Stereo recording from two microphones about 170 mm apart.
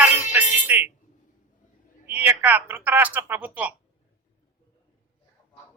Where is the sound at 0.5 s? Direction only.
10° right (ahead or behind).